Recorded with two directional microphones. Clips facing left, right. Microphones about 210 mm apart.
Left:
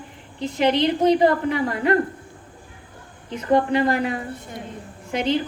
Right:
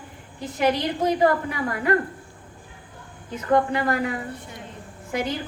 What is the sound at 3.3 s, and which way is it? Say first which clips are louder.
A woman's voice: left 2 dB; 20° left (ahead or behind).